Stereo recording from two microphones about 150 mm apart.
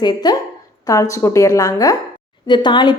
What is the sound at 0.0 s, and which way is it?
A woman's voice, 25° left (ahead or behind).